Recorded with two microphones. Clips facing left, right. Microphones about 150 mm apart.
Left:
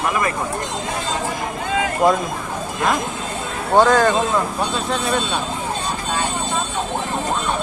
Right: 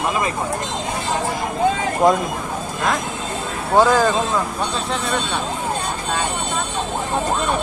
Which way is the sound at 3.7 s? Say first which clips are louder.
Left 1 dB; 5° right (ahead or behind).